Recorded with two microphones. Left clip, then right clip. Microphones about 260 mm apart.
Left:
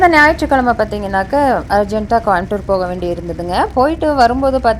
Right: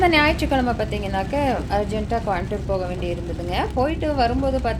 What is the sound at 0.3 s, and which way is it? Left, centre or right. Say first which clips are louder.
A woman's voice: left 9 dB; centre.